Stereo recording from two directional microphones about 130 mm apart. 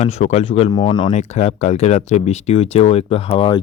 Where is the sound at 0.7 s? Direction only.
35° left (ahead or behind).